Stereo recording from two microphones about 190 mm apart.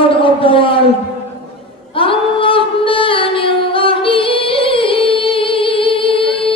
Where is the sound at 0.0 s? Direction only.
30° left (ahead or behind).